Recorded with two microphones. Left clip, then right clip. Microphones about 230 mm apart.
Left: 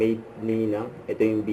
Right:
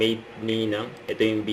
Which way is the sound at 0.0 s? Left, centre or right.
Centre.